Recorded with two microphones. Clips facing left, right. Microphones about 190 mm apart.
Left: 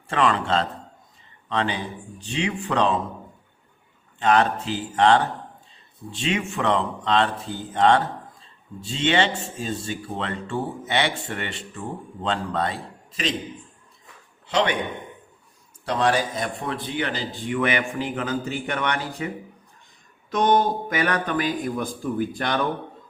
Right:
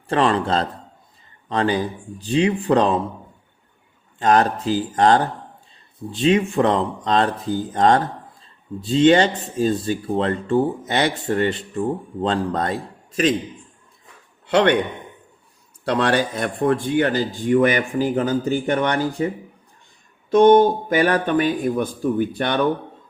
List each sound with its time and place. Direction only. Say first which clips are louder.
0.1 s speech: right 3 dB; 35° right (ahead or behind)
4.2 s speech: right 3 dB; 40° right (ahead or behind)
14.4 s a man's voice: right 7 dB; 60° right (ahead or behind)
15.8 s speech: right 3 dB; 65° right (ahead or behind); by 19.3 s 35° right (ahead or behind)
20.3 s speech: right 8 dB; 30° right (ahead or behind)